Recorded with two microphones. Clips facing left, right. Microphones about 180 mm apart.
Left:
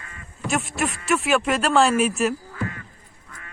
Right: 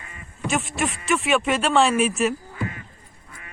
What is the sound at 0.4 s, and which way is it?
A man's voice, centre (ahead or behind).